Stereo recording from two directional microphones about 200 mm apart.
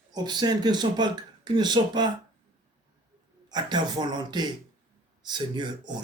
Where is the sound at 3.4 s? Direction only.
20° right (ahead or behind).